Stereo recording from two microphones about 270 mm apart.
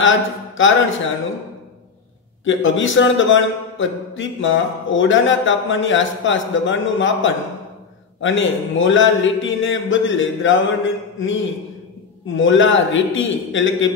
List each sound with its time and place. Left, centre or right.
0.0 s speech: left
2.4 s a man's voice: left